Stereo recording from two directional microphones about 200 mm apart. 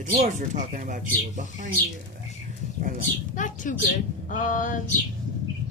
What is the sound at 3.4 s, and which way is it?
A woman's voice, 40° left (ahead or behind).